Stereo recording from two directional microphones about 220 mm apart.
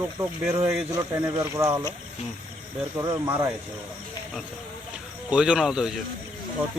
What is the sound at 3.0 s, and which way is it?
Speech, 15° right (ahead or behind).